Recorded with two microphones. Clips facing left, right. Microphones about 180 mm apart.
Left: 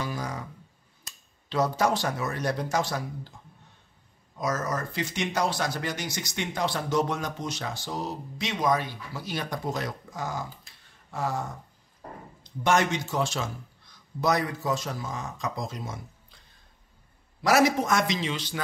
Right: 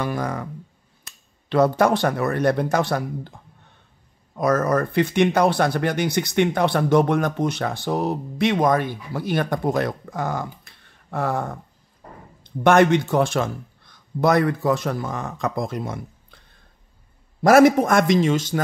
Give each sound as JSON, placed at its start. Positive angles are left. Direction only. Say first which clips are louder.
{"t": 0.0, "sound": "speech", "louder": "right 7 dB", "side_deg": -60}
{"t": 4.4, "sound": "speech", "louder": "right 10 dB", "side_deg": -60}
{"t": 17.4, "sound": "a man's voice", "louder": "right 9 dB", "side_deg": -50}